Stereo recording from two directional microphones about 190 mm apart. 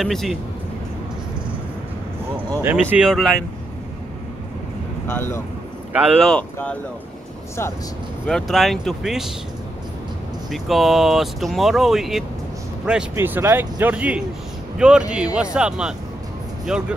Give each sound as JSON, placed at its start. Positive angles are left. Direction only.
{"t": 0.0, "sound": "speech", "side_deg": 0}
{"t": 2.5, "sound": "speech", "side_deg": -10}
{"t": 5.1, "sound": "speech", "side_deg": 15}
{"t": 5.9, "sound": "speech", "side_deg": 0}
{"t": 8.3, "sound": "speech", "side_deg": 0}
{"t": 10.5, "sound": "speech", "side_deg": 0}